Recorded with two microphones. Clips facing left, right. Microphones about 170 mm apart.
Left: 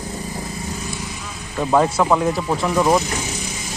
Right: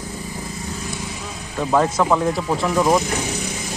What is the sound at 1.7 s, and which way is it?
Speech, 10° left (ahead or behind).